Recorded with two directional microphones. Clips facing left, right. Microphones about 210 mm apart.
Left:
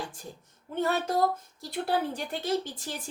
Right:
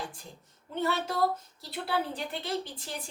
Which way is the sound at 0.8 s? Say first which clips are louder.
Left 2 dB; 45° left (ahead or behind).